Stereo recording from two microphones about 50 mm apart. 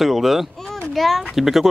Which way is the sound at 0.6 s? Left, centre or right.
Centre.